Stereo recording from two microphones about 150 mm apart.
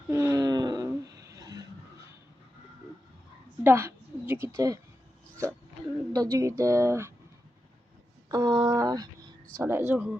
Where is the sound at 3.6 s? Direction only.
15° right (ahead or behind).